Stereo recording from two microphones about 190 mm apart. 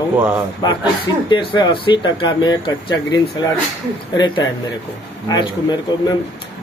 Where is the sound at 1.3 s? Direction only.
25° left (ahead or behind).